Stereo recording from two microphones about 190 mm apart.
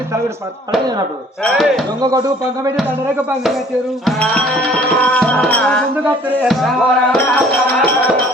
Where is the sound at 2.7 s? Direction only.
10° right (ahead or behind).